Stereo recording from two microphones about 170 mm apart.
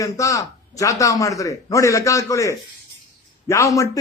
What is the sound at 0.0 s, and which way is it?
A man's voice, 20° left (ahead or behind).